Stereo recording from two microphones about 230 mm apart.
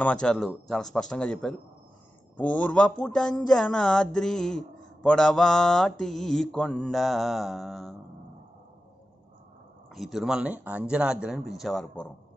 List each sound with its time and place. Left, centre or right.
0.0 s speech: centre
9.8 s speech: centre